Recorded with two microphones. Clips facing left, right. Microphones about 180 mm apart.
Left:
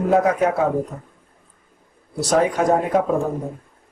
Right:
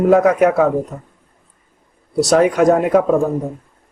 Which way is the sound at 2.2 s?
75° right (ahead or behind).